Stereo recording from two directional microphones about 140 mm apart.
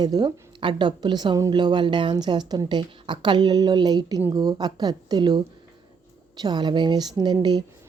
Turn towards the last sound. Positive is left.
turn(degrees=-30)  # may be behind; listen again after turning